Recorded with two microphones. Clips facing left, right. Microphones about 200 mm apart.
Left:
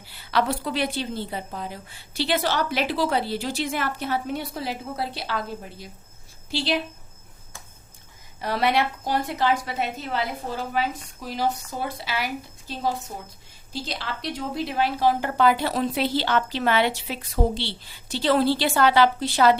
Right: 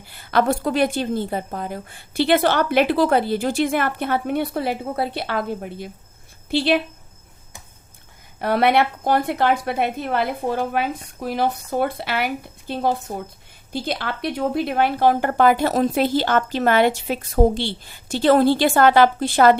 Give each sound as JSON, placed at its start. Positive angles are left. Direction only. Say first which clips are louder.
{"t": 0.0, "sound": "a woman's voice", "louder": "right 5 dB", "side_deg": -50}
{"t": 8.4, "sound": "a woman's voice", "louder": "right 5 dB", "side_deg": -60}